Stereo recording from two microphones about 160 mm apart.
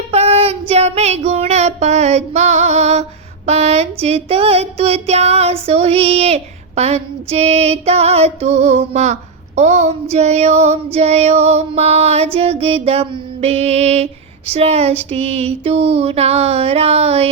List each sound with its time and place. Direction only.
0.1 s child singing: 40° right (ahead or behind)
0.7 s female singing: 40° right (ahead or behind)